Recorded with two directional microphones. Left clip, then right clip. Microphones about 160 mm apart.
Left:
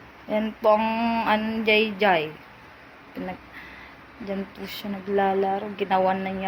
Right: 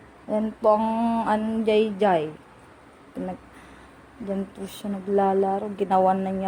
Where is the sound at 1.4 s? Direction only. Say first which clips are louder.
Even; 40° right (ahead or behind).